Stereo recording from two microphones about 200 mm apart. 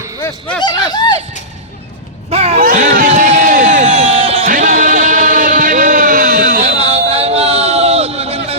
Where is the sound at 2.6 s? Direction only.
45° right (ahead or behind).